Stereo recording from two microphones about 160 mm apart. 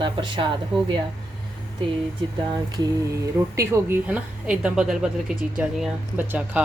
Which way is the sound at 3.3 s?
15° right (ahead or behind).